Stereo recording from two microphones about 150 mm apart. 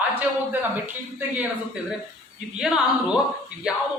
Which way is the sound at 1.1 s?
10° right (ahead or behind).